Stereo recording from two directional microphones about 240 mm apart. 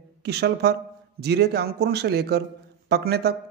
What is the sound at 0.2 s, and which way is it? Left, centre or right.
A man's voice, right.